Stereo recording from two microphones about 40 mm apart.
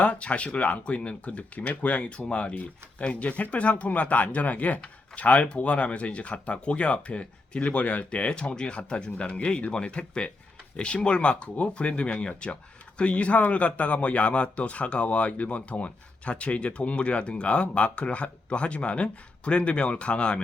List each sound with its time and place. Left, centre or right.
0.0 s a man's voice: left